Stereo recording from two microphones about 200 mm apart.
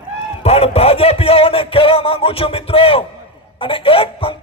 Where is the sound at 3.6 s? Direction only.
25° left (ahead or behind).